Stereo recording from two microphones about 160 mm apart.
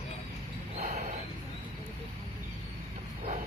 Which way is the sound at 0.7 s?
50° right (ahead or behind).